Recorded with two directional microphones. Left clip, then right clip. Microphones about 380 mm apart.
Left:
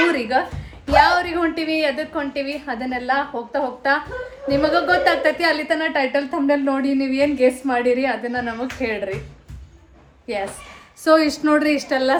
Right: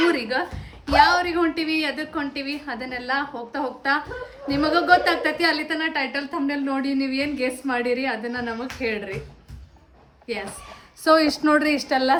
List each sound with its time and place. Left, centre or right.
0.1 s a woman's voice: centre
10.3 s a woman's voice: centre
11.0 s a woman's voice: centre